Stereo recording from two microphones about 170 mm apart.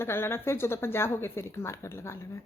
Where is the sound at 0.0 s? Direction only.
15° left (ahead or behind).